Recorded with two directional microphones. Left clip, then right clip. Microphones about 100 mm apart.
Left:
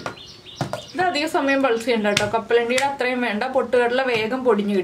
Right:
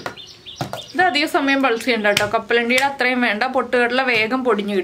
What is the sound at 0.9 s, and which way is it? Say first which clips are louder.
Speech: right 4 dB; 25° right (ahead or behind).